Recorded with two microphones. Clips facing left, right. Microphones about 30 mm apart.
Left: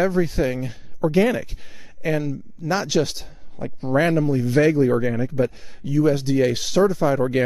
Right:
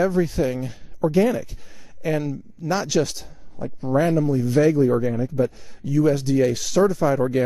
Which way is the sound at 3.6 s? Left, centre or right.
Left.